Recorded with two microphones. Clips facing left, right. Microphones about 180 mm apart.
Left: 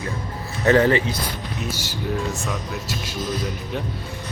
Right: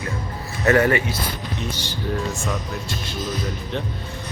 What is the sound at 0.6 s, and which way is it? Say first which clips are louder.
Speech: left 1 dB; 20° left (ahead or behind).